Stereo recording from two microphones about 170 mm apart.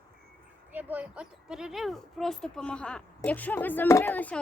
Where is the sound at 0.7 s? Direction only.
10° right (ahead or behind).